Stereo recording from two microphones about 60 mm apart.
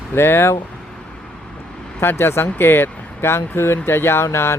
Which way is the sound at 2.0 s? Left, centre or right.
Left.